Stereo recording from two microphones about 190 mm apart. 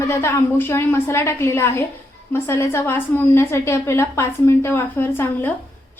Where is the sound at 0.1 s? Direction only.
10° left (ahead or behind).